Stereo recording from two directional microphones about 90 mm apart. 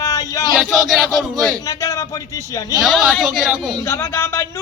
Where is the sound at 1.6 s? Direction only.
40° left (ahead or behind).